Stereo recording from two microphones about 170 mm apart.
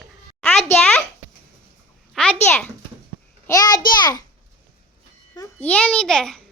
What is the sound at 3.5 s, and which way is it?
Speech, 25° left (ahead or behind).